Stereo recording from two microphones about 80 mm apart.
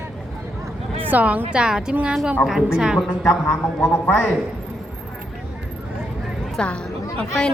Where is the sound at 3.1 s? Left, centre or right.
Centre.